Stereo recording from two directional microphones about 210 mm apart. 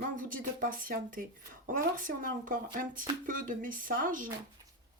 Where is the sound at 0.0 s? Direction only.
40° right (ahead or behind).